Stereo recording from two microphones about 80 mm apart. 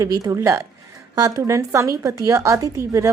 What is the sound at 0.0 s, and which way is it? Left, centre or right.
A woman's voice, right.